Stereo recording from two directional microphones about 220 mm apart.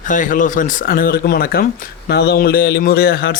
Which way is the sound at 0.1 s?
35° left (ahead or behind).